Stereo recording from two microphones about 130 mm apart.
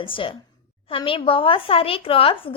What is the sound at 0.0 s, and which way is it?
A woman's voice, 40° left (ahead or behind).